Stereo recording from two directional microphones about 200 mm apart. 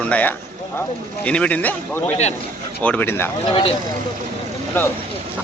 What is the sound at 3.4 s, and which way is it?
Speech, 30° left (ahead or behind).